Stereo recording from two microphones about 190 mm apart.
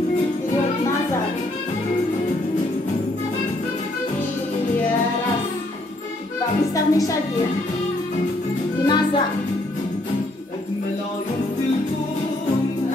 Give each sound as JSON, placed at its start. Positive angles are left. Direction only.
{"t": 6.7, "sound": "music", "side_deg": 15}
{"t": 8.8, "sound": "speech", "side_deg": 25}